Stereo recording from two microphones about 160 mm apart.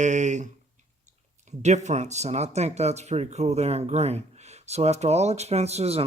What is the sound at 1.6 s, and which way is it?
Speech, 45° right (ahead or behind).